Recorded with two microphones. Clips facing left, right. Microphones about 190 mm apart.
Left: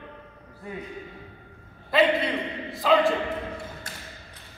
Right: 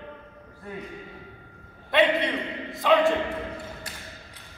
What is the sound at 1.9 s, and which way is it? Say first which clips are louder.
A man's voice: even; centre (ahead or behind).